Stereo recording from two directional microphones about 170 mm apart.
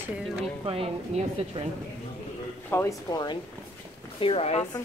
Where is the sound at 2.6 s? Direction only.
15° left (ahead or behind).